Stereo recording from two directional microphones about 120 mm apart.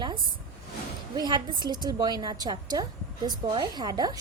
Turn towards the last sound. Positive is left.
turn(degrees=-35)  # may be behind; listen again after turning